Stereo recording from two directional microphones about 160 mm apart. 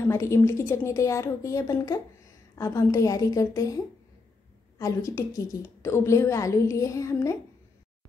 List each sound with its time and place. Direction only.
0.0 s a woman's voice: 15° left (ahead or behind)